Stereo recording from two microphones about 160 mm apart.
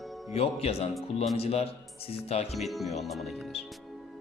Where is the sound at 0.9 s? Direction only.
Centre (ahead or behind).